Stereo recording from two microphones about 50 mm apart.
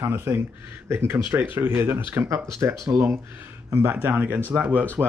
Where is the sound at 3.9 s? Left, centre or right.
Right.